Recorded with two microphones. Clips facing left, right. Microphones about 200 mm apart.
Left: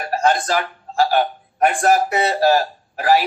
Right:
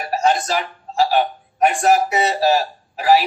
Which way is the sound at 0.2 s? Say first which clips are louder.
Left 1 dB; 55° left (ahead or behind).